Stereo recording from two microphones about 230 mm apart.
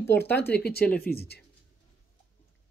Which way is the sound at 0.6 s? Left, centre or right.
Left.